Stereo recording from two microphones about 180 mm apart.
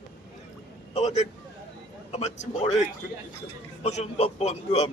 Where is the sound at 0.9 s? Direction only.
40° left (ahead or behind).